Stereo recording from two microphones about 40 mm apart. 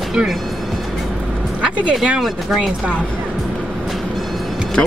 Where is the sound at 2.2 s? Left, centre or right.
Centre.